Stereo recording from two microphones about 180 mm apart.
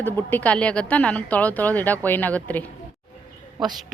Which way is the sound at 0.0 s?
10° left (ahead or behind).